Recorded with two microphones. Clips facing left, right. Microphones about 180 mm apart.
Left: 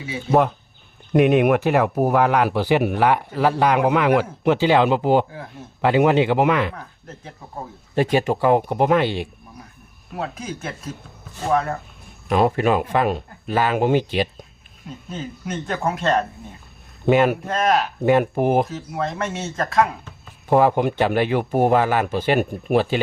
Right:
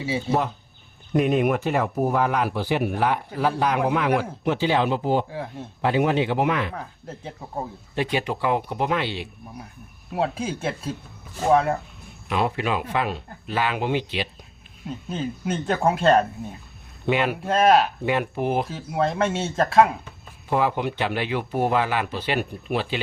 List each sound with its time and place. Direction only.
0.3 s speech: 55° left (ahead or behind)
1.1 s speech: 70° left (ahead or behind)
7.9 s speech: 45° left (ahead or behind)
10.2 s speech: 30° right (ahead or behind)
12.3 s speech: 45° left (ahead or behind)
15.4 s speech: 30° right (ahead or behind)
17.1 s speech: 45° left (ahead or behind)
17.4 s speech: 30° right (ahead or behind)
18.0 s speech: 45° left (ahead or behind)
18.7 s speech: 30° right (ahead or behind)
20.5 s speech: 50° left (ahead or behind)